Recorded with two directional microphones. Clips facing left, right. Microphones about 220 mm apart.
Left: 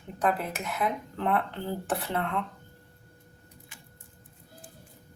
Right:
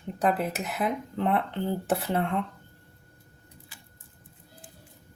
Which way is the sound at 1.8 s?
25° right (ahead or behind).